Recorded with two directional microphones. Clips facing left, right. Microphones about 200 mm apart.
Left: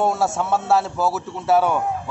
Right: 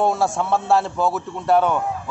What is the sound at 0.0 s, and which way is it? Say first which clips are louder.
A man's voice: right 1 dB; 5° left (ahead or behind).